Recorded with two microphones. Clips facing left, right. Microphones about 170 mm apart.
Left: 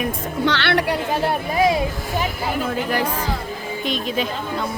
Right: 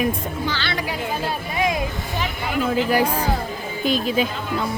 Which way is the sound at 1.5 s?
35° left (ahead or behind).